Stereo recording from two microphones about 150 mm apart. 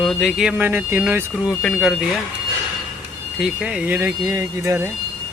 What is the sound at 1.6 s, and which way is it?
Speech, centre (ahead or behind).